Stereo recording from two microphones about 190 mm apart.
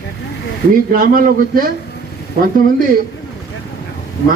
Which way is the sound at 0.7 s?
50° right (ahead or behind).